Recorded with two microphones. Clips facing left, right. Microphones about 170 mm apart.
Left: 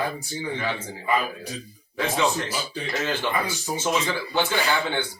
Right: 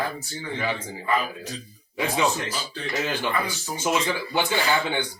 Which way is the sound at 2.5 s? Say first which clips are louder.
Left 2 dB; 10° left (ahead or behind).